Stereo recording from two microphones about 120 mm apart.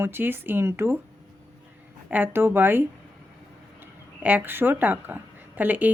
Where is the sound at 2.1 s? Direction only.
15° right (ahead or behind).